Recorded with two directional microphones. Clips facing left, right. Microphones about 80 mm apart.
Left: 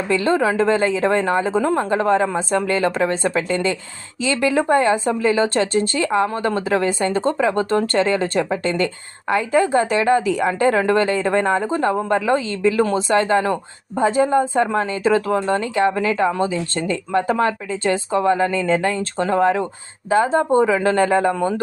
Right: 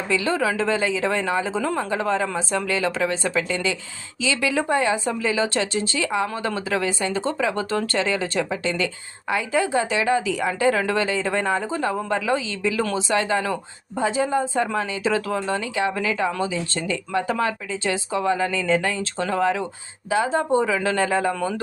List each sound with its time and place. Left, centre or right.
0.1 s speech: left